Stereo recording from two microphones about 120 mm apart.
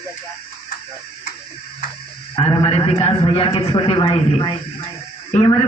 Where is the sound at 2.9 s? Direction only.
45° left (ahead or behind).